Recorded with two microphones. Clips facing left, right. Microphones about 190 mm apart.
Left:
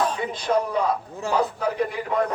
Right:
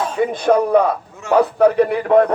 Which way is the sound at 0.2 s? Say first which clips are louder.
Right 8 dB; 55° right (ahead or behind).